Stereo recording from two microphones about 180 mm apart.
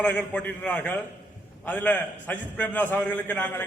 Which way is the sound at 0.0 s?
10° left (ahead or behind).